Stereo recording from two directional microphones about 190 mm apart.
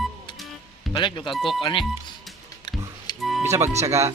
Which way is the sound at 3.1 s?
25° left (ahead or behind).